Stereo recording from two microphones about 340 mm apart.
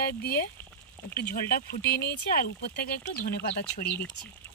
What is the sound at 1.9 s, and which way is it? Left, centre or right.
Speech, left.